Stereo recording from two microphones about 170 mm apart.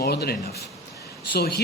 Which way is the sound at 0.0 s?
70° left (ahead or behind).